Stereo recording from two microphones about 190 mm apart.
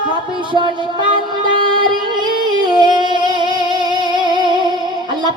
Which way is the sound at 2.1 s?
25° right (ahead or behind).